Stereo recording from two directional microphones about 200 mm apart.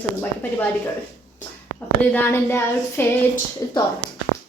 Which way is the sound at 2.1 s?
10° left (ahead or behind).